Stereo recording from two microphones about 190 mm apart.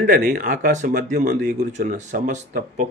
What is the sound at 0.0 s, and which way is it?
Speech, 45° right (ahead or behind).